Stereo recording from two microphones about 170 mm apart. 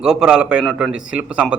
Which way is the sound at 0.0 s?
5° right (ahead or behind).